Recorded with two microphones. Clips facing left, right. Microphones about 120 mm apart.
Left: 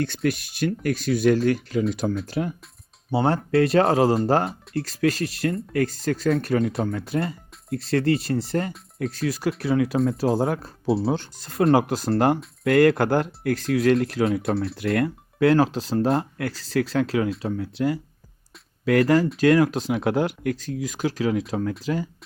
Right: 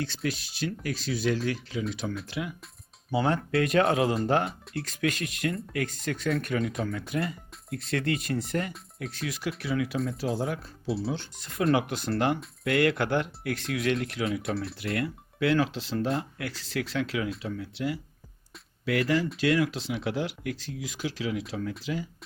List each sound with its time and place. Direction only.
0.0 s speech: 55° left (ahead or behind)
2.2 s speech: 40° left (ahead or behind)
10.8 s speech: centre (ahead or behind)
11.1 s speech: 40° left (ahead or behind)